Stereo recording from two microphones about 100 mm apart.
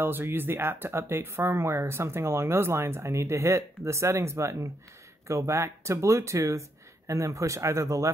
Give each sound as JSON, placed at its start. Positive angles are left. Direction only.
{"t": 0.0, "sound": "speech", "side_deg": -20}